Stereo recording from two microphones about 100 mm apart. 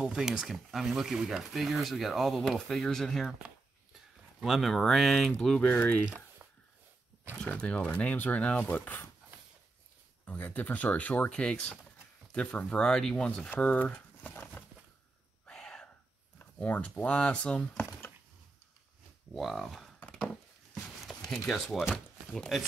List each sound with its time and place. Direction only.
0.0 s speech: 5° right (ahead or behind)
4.4 s speech: 5° right (ahead or behind); by 6.0 s 15° left (ahead or behind)
6.0 s a sound: 20° right (ahead or behind)
7.4 s speech: 10° left (ahead or behind)
10.2 s speech: 15° left (ahead or behind)
15.4 s whispering: 5° left (ahead or behind)
16.3 s speech: 15° left (ahead or behind)
19.3 s speech: centre (ahead or behind)
20.0 s a sound: 10° left (ahead or behind)
21.3 s speech: 5° left (ahead or behind)